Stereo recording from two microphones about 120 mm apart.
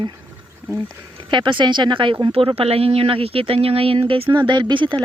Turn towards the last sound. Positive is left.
turn(degrees=-40)  # may be behind; listen again after turning